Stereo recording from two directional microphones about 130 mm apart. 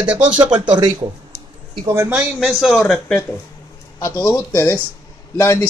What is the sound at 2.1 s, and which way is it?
Speech, 5° right (ahead or behind).